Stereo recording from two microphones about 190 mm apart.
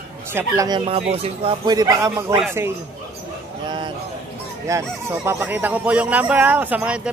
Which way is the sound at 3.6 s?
25° right (ahead or behind).